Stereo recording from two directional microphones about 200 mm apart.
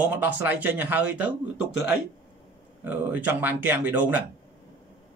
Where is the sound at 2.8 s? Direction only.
10° right (ahead or behind).